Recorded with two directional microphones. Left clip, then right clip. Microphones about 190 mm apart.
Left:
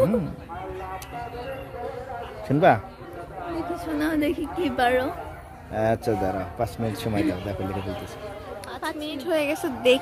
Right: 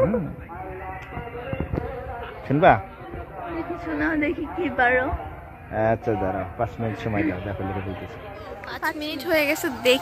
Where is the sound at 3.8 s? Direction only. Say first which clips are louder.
Right 2 dB; 15° left (ahead or behind).